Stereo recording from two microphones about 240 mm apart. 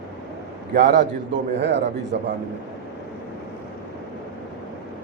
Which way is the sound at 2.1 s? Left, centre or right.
Right.